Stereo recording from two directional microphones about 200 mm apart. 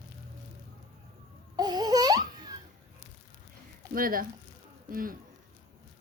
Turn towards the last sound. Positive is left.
turn(degrees=-45)  # may be behind; listen again after turning